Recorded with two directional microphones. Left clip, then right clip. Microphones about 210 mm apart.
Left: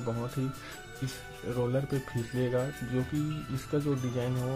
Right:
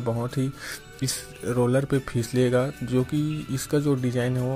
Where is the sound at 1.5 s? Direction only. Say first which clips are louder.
Right 8 dB; 20° right (ahead or behind).